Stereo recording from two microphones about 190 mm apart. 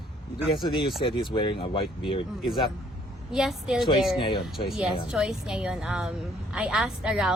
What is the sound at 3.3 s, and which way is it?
Speech, centre (ahead or behind).